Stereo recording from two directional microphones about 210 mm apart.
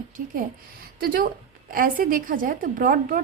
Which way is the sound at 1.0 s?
45° right (ahead or behind).